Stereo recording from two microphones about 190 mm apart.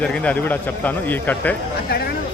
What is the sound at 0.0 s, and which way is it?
A man's voice, 5° left (ahead or behind).